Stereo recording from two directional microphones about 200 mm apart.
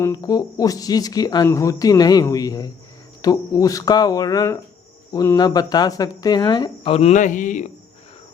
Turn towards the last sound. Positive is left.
turn(degrees=40)  # may be behind; listen again after turning